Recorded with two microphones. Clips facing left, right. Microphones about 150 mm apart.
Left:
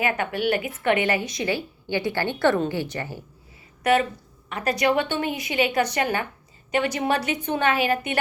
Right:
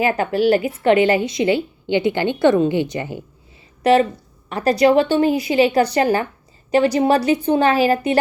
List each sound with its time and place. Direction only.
0.0 s a woman's voice: 30° right (ahead or behind)
3.8 s a woman's voice: 30° right (ahead or behind)